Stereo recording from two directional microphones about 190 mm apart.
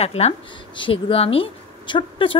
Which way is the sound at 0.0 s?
35° left (ahead or behind).